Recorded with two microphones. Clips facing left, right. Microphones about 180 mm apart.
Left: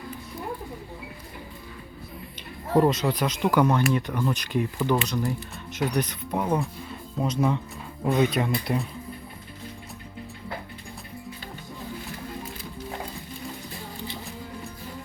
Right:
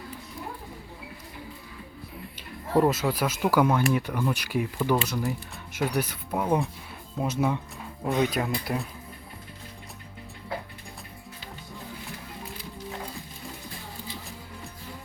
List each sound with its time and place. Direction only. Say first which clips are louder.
2.7 s speech: left 2 dB; 5° right (ahead or behind)